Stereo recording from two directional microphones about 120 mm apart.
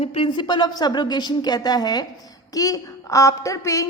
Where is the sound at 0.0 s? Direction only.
55° left (ahead or behind).